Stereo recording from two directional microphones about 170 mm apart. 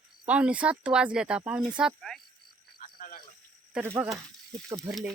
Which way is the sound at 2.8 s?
55° left (ahead or behind).